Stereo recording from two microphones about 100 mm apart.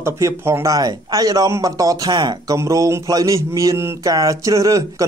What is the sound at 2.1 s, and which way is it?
Speech, 45° right (ahead or behind).